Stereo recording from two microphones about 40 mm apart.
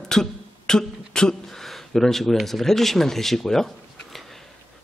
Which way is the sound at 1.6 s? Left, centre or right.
Centre.